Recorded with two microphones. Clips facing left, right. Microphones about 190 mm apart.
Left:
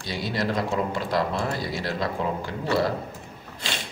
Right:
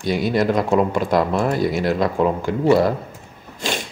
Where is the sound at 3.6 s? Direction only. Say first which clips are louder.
Right 9 dB; 45° right (ahead or behind).